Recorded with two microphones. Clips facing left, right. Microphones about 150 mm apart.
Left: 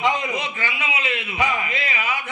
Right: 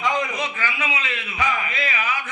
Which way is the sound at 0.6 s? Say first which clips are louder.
Even; 25° left (ahead or behind).